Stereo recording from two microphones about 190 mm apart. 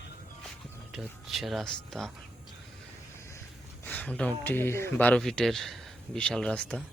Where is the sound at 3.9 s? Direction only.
5° left (ahead or behind).